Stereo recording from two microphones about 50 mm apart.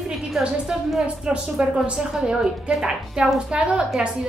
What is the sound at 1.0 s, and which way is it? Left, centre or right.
A woman's voice, right.